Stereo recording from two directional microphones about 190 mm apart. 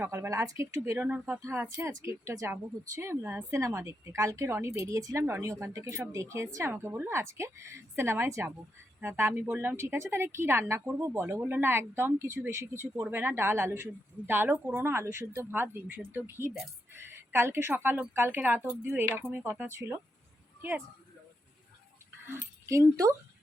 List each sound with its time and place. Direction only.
0.0 s a woman's voice: 10° right (ahead or behind)
22.3 s speech: 15° right (ahead or behind)